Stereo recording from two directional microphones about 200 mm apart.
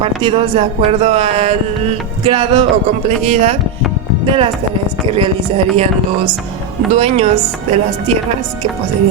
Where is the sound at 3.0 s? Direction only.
35° right (ahead or behind).